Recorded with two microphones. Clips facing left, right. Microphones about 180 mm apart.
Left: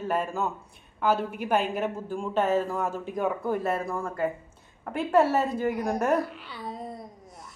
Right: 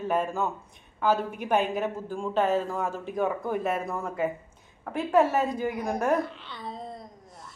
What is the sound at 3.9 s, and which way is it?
A woman's voice, 5° right (ahead or behind).